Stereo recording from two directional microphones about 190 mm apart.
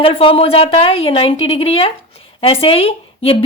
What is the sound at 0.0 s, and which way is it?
Speech, 30° left (ahead or behind).